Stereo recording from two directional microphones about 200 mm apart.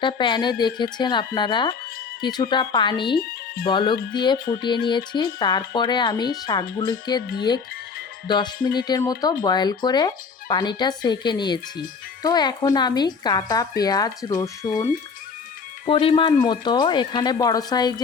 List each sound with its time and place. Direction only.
0.0 s speech: 25° left (ahead or behind)
3.2 s speech: 50° left (ahead or behind)
3.7 s speech: 25° left (ahead or behind)
8.3 s speech: 25° left (ahead or behind)
14.7 s speech: 40° left (ahead or behind)
15.9 s speech: 25° left (ahead or behind)